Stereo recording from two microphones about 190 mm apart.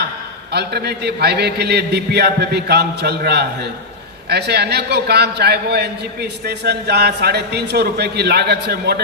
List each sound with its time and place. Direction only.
0.5 s a man's voice: 60° right (ahead or behind)